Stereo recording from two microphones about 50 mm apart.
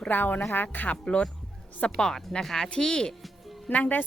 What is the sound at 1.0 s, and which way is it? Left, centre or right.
Speech, left.